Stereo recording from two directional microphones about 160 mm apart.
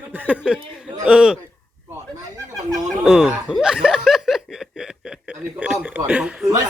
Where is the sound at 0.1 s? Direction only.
10° right (ahead or behind).